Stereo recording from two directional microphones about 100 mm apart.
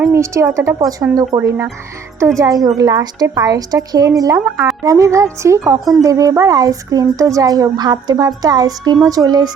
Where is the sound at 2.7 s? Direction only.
35° right (ahead or behind).